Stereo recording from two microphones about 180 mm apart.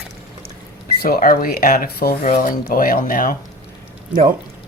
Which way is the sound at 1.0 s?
50° left (ahead or behind).